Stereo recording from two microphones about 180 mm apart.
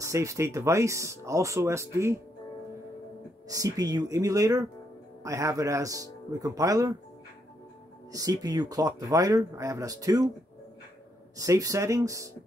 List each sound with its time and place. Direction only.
0.0 s speech: 15° right (ahead or behind)
3.4 s speech: 20° right (ahead or behind)
8.1 s speech: 20° right (ahead or behind)
11.3 s speech: 20° right (ahead or behind)